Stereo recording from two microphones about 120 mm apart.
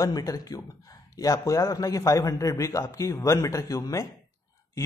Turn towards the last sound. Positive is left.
turn(degrees=25)  # may be behind; listen again after turning